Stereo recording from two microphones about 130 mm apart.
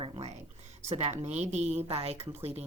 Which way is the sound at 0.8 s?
55° right (ahead or behind).